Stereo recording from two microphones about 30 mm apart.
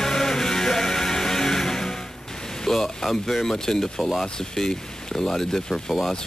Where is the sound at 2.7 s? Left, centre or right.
Centre.